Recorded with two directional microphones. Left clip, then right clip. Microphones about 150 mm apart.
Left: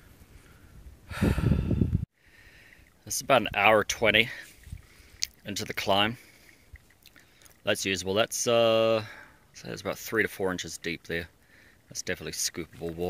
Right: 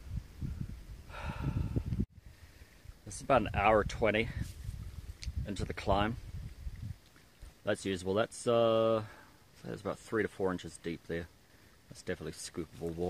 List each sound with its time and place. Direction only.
1.1 s snort: 15° left (ahead or behind)
3.1 s speech: 15° left (ahead or behind)
7.6 s speech: 15° left (ahead or behind)